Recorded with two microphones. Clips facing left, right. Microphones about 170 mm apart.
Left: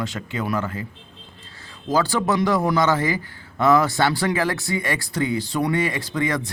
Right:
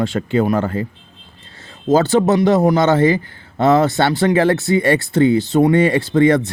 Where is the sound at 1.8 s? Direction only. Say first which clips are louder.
Right 8 dB; 25° right (ahead or behind).